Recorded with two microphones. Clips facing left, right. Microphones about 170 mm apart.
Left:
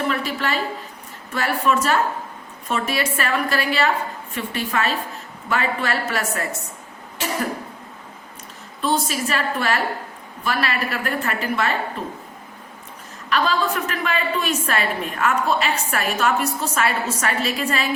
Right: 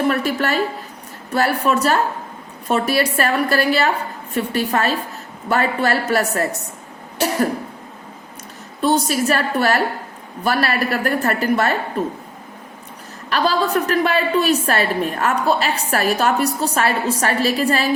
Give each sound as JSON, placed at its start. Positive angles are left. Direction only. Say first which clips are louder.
{"t": 0.1, "sound": "a woman's voice", "louder": "right 4 dB", "side_deg": -45}
{"t": 8.8, "sound": "a woman's voice", "louder": "right 5 dB", "side_deg": -40}
{"t": 13.3, "sound": "a woman's voice", "louder": "right 3 dB", "side_deg": -35}